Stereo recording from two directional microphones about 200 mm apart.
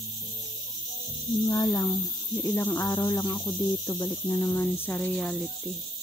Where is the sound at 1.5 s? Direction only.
20° left (ahead or behind); by 5.7 s centre (ahead or behind).